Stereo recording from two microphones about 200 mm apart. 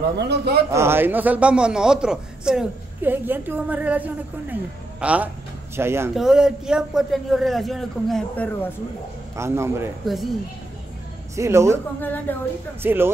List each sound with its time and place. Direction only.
0.1 s a man's voice: 55° right (ahead or behind)
0.7 s a man's voice: 15° right (ahead or behind); by 8.7 s 5° left (ahead or behind)
9.4 s a man's voice: 15° right (ahead or behind)
11.3 s a man's voice: 15° right (ahead or behind)
12.0 s a woman's voice: 10° left (ahead or behind)
12.8 s a man's voice: 10° right (ahead or behind)